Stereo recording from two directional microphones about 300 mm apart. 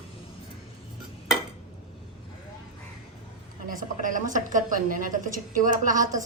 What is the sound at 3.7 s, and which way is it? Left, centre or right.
A woman's voice, right.